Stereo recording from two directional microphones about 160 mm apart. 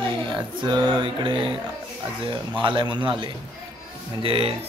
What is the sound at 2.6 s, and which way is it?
A man's voice, 30° right (ahead or behind).